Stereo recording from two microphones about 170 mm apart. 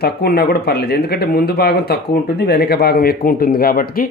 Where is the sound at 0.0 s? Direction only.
65° left (ahead or behind).